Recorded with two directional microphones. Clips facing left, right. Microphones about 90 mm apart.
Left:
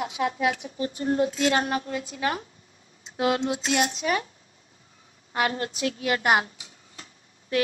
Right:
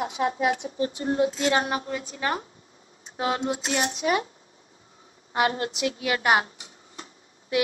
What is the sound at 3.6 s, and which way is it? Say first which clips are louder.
Speech: left 2 dB; 30° right (ahead or behind).